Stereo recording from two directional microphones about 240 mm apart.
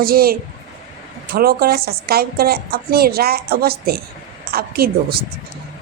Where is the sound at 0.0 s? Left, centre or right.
Right.